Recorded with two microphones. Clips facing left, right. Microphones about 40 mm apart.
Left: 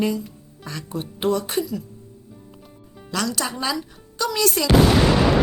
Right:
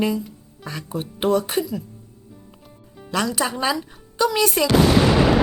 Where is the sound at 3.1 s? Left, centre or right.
Centre.